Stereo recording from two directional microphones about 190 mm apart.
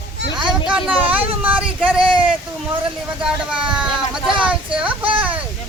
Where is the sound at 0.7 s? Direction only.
10° right (ahead or behind).